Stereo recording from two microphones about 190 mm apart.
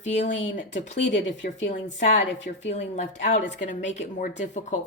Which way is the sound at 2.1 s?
75° left (ahead or behind).